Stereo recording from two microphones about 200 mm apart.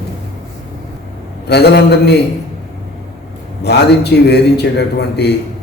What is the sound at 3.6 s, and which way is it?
A man's voice, 55° left (ahead or behind).